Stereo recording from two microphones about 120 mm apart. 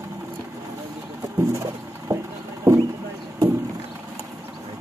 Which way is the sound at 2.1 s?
30° right (ahead or behind).